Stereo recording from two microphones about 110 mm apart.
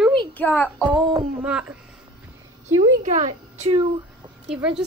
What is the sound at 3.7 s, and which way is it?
Speech, 50° right (ahead or behind).